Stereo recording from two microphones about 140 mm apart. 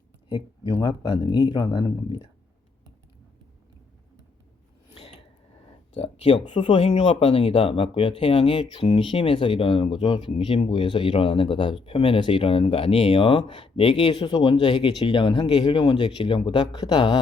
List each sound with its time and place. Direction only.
0.3 s speech: 35° left (ahead or behind)
5.9 s speech: 45° left (ahead or behind); by 17.2 s 30° left (ahead or behind)